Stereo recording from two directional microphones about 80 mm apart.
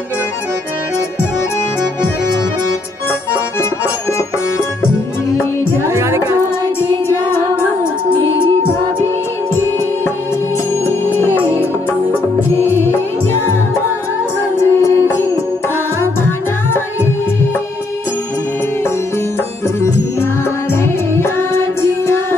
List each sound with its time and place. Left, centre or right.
5.9 s music: right
10.9 s music: left
11.2 s music: right
14.6 s music: left
21.1 s music: left